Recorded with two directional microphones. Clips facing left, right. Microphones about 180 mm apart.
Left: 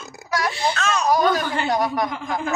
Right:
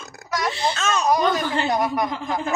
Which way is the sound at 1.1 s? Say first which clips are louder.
Left 1 dB; centre (ahead or behind).